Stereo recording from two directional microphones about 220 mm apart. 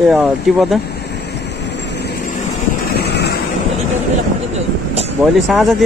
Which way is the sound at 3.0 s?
50° left (ahead or behind).